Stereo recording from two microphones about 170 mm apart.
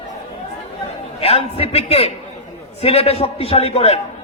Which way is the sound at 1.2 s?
35° left (ahead or behind).